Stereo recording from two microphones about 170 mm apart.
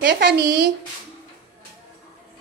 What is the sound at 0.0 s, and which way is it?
Speech, 90° right.